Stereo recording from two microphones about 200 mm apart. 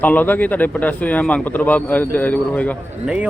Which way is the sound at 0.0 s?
10° left (ahead or behind).